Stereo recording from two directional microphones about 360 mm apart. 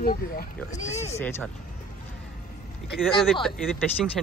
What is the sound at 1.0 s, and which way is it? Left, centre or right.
Speech, centre.